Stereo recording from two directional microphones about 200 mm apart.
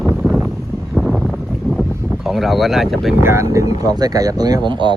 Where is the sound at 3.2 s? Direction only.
15° right (ahead or behind).